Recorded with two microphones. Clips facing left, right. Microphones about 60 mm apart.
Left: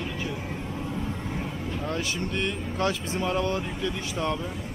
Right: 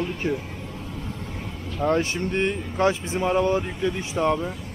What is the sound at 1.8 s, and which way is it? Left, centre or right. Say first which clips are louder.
Speech: right 10 dB; right.